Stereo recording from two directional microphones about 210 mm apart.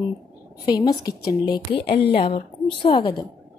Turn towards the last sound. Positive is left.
turn(degrees=25)  # may be behind; listen again after turning